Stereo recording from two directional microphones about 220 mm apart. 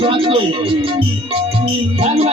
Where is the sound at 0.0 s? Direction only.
25° right (ahead or behind).